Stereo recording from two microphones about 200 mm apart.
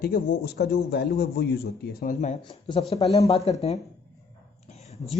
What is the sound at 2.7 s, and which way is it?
Speech, 30° left (ahead or behind).